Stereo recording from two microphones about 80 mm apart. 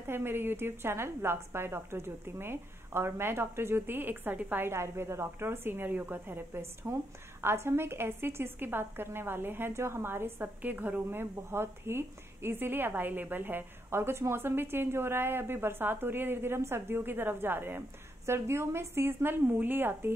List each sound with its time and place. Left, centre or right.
0.0 s a woman's voice: right